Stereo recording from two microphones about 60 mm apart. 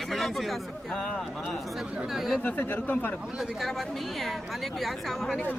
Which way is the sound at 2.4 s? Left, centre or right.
Left.